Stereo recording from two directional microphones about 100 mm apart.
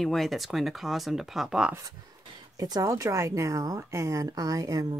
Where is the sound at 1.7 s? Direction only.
30° right (ahead or behind).